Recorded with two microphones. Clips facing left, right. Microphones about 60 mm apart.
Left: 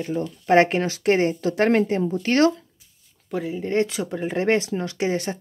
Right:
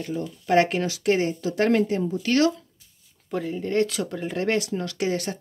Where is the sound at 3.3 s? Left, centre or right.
Centre.